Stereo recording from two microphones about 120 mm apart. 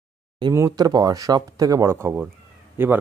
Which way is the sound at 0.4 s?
30° right (ahead or behind).